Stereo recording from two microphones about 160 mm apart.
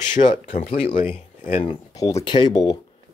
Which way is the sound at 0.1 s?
50° left (ahead or behind).